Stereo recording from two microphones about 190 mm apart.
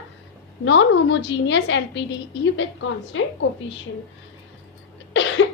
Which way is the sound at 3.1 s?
90° left.